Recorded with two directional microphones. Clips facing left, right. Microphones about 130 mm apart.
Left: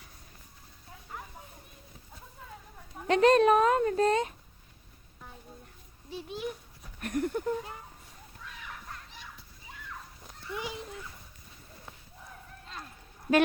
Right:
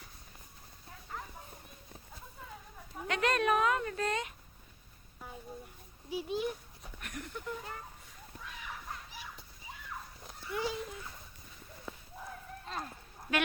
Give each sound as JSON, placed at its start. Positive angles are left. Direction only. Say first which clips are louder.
{"t": 1.1, "sound": "a sound", "louder": "even", "side_deg": 5}
{"t": 3.1, "sound": "speech", "louder": "left 9 dB", "side_deg": 30}
{"t": 6.1, "sound": "a child's voice", "louder": "right 2 dB", "side_deg": -5}
{"t": 7.0, "sound": "speech", "louder": "left 13 dB", "side_deg": 45}
{"t": 8.9, "sound": "fowl", "louder": "right 1 dB", "side_deg": -5}
{"t": 10.5, "sound": "dog", "louder": "right 2 dB", "side_deg": 20}
{"t": 12.6, "sound": "a sound", "louder": "right 5 dB", "side_deg": -45}